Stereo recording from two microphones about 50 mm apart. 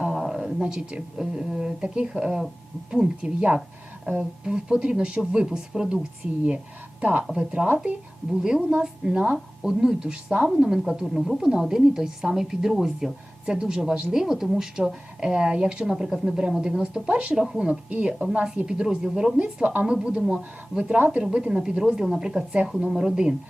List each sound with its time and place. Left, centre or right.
0.1 s a sound: centre
0.7 s a woman's voice: centre
7.0 s speech: right
7.3 s a woman's voice: right
11.0 s speech: centre
11.3 s a woman's voice: centre
17.4 s a woman's voice: centre
17.7 s a woman's voice: right
19.4 s a woman's voice: right